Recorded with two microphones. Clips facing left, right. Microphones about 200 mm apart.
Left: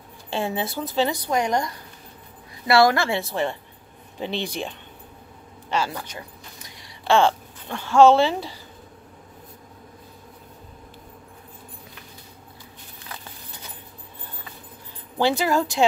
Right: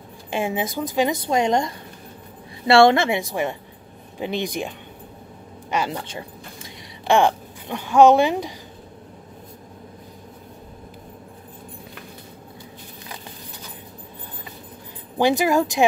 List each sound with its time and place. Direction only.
0.3 s a woman's voice: 15° right (ahead or behind)
15.1 s a woman's voice: 15° right (ahead or behind)